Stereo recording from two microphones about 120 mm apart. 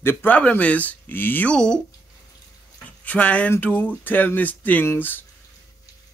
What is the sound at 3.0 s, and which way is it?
Speech, 15° left (ahead or behind).